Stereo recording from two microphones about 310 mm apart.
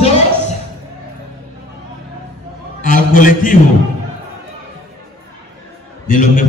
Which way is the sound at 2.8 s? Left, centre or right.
Left.